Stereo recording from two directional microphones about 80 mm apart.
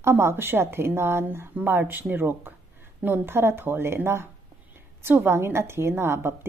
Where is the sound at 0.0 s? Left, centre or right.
Right.